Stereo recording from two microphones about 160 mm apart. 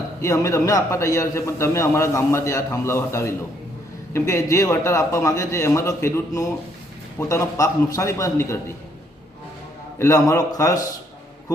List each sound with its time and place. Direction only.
0.2 s a man's voice: 20° left (ahead or behind)
10.0 s a man's voice: 20° left (ahead or behind)